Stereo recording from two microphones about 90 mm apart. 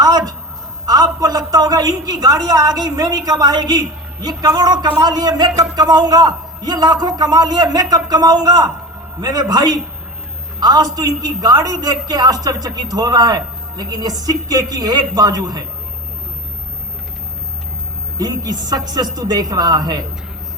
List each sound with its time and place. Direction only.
0.0 s a sound: 45° right (ahead or behind)
0.9 s a woman's voice: 45° right (ahead or behind)
18.2 s a woman's voice: 45° right (ahead or behind)